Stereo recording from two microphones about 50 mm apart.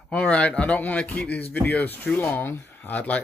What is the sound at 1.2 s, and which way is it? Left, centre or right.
Speech, left.